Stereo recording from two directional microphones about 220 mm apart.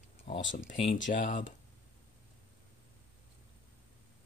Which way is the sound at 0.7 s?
30° left (ahead or behind).